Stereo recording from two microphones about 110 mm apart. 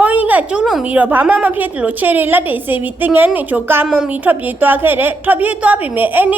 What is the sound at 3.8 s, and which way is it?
A woman's voice, 5° right (ahead or behind).